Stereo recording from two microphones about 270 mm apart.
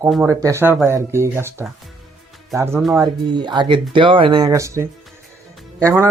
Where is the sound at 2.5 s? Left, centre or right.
Centre.